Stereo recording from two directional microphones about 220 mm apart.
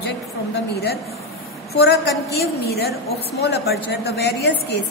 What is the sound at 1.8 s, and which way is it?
A woman's voice, 50° left (ahead or behind).